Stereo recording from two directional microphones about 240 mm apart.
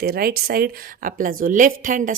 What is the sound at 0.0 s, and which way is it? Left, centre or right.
A woman's voice, right.